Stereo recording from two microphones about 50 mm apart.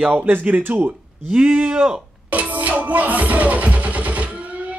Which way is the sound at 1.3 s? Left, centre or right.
Right.